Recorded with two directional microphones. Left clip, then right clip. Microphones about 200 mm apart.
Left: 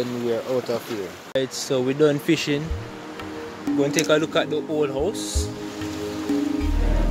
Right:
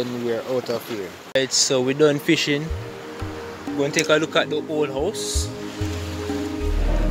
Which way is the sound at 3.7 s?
15° left (ahead or behind).